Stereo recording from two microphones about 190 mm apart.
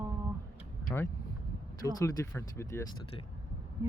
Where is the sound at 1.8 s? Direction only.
15° left (ahead or behind).